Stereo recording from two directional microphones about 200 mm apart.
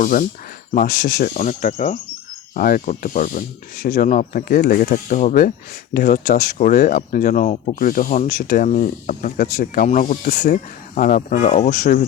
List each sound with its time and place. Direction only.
0.0 s speech: 40° left (ahead or behind)